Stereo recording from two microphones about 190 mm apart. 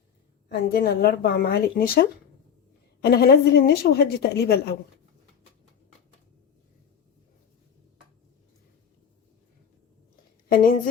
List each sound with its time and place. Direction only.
0.4 s a woman's voice: 55° left (ahead or behind)